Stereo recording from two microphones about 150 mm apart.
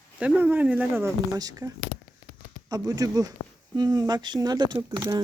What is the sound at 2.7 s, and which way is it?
Speech, 25° right (ahead or behind).